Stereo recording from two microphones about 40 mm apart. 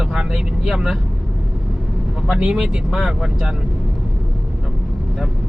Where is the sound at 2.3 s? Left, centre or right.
Right.